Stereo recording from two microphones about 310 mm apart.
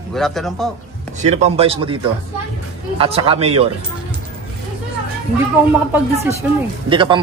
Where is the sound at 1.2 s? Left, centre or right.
Right.